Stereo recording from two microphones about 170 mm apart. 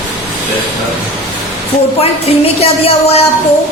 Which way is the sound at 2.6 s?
35° left (ahead or behind).